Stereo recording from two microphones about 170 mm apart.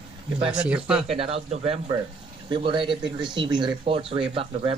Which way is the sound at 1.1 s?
35° right (ahead or behind).